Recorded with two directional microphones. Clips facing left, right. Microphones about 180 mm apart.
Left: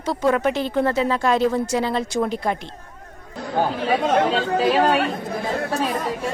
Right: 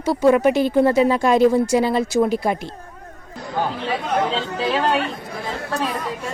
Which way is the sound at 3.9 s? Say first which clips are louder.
Left 4 dB; 45° left (ahead or behind).